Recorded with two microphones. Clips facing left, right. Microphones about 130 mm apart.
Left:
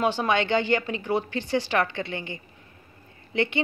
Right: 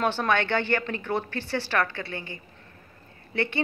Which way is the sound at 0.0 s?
10° left (ahead or behind).